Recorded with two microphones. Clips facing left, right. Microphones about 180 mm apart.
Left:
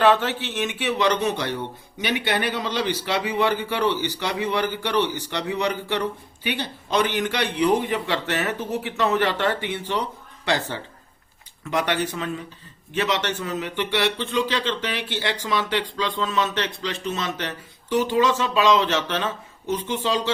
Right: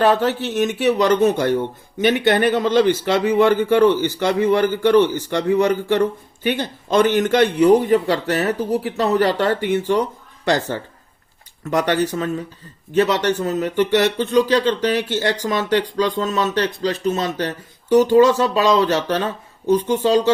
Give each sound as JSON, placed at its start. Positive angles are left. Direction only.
{"t": 0.0, "sound": "a man's voice", "side_deg": -35}